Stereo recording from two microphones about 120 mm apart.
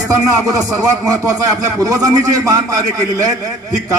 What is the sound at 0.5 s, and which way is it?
Speech, 30° right (ahead or behind).